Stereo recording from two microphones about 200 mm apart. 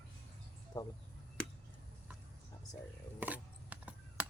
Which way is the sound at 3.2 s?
10° right (ahead or behind).